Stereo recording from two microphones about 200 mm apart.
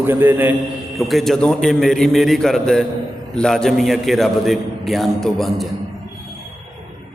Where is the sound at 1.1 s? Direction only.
Centre (ahead or behind).